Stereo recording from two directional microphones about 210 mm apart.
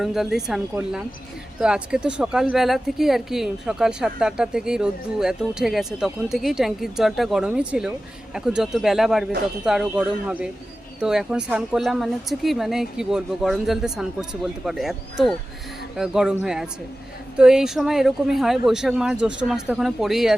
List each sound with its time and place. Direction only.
0.0 s speech: centre (ahead or behind)